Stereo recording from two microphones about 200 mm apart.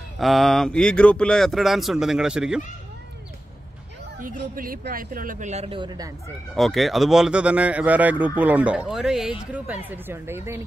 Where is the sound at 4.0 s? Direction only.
45° right (ahead or behind); by 6.1 s 20° right (ahead or behind).